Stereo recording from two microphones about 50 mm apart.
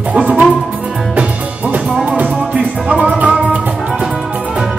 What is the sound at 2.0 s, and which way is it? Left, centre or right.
Music, right.